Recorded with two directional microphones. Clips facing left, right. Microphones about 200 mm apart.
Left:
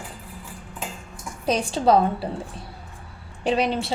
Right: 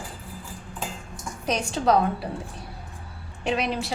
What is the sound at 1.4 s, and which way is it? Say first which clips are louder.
Speech: left 3 dB; 30° left (ahead or behind).